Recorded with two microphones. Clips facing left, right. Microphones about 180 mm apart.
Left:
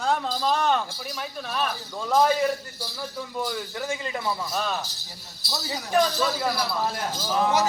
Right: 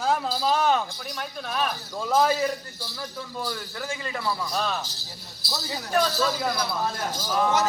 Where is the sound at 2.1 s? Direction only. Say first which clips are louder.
Left 1 dB; centre (ahead or behind).